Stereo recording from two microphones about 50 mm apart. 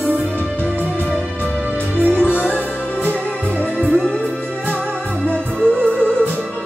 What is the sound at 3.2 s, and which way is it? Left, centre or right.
Music, left.